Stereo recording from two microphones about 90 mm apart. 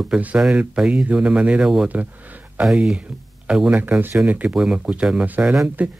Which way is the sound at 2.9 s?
15° right (ahead or behind).